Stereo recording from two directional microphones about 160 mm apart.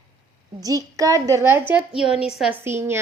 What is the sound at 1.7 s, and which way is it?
Speech, 5° right (ahead or behind).